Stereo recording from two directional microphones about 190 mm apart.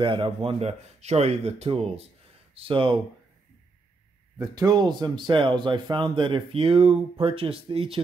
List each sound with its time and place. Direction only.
0.0 s speech: 25° right (ahead or behind)
4.6 s speech: 20° right (ahead or behind)